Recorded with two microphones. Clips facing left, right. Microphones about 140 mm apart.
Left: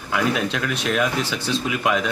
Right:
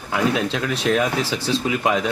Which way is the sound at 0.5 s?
30° right (ahead or behind).